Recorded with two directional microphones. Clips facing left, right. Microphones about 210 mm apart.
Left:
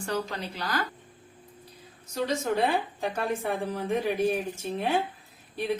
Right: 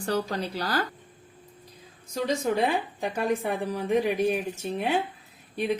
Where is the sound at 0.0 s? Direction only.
35° right (ahead or behind).